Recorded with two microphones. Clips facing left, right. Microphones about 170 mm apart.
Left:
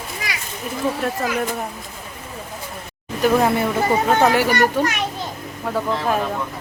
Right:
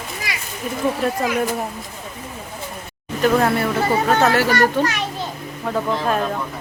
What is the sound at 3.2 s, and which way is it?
A child's voice, 15° left (ahead or behind).